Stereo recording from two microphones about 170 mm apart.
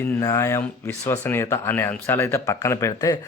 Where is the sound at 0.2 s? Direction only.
15° left (ahead or behind).